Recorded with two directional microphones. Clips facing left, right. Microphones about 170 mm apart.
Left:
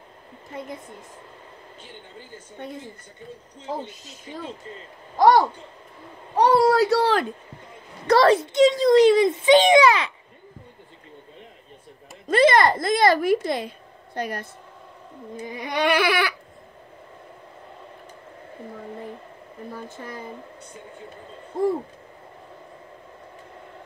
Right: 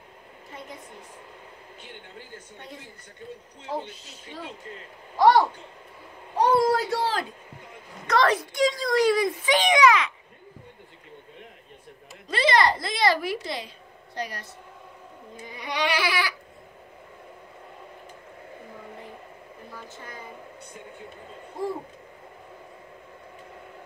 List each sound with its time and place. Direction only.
5.1 s speech: 45° left (ahead or behind)
6.3 s speech: 75° left (ahead or behind)
8.1 s a child's voice: 30° left (ahead or behind)
12.3 s speech: 50° left (ahead or behind)
15.3 s baby cry: 45° left (ahead or behind)